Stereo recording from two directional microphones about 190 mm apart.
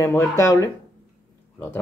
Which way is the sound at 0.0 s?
15° left (ahead or behind).